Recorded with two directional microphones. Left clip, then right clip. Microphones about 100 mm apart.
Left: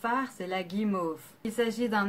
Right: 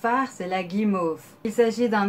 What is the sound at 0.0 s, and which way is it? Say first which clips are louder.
Speech: right 7 dB; 10° left (ahead or behind).